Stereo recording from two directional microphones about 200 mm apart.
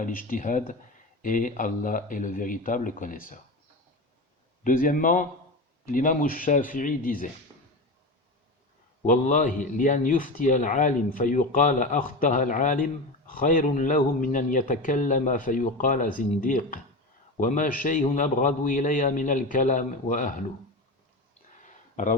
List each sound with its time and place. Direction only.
0.0 s a man's voice: 45° left (ahead or behind)
4.6 s a man's voice: 45° left (ahead or behind)
9.0 s a man's voice: 40° left (ahead or behind)
21.6 s a sound: 40° left (ahead or behind)